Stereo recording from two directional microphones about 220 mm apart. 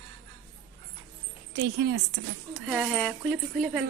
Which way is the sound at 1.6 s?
50° right (ahead or behind).